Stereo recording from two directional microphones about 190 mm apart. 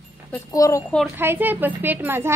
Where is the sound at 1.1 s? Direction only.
10° right (ahead or behind).